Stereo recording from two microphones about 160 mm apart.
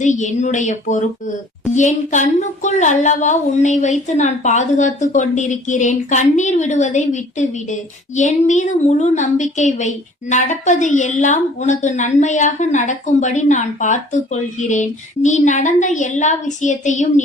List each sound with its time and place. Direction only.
0.0 s speech: 50° left (ahead or behind)